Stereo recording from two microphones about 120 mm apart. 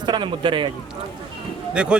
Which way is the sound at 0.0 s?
40° right (ahead or behind).